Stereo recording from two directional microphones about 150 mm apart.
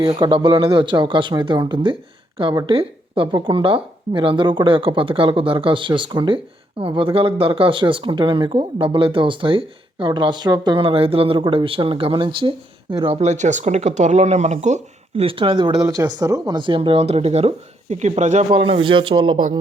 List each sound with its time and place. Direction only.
0.1 s speech: 35° right (ahead or behind)